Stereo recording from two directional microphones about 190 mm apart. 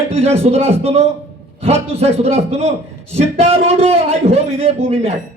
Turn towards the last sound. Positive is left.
turn(degrees=-35)  # may be behind; listen again after turning